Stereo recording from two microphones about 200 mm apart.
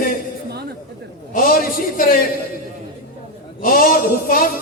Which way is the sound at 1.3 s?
45° left (ahead or behind).